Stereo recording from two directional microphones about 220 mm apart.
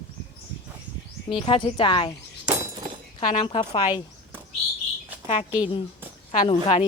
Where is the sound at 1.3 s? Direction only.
25° left (ahead or behind).